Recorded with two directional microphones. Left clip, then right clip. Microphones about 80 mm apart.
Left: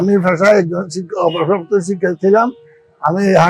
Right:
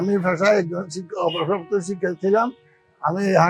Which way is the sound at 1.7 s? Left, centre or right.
Left.